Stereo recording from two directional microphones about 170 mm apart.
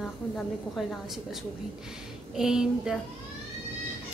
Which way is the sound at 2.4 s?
5° right (ahead or behind).